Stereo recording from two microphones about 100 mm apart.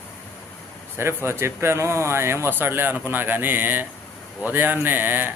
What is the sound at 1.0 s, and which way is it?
Speech, 25° right (ahead or behind).